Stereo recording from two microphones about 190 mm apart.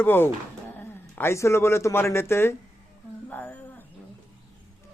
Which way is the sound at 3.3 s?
10° left (ahead or behind).